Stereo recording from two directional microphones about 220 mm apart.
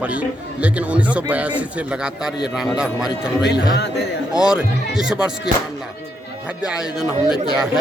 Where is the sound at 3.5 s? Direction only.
50° left (ahead or behind).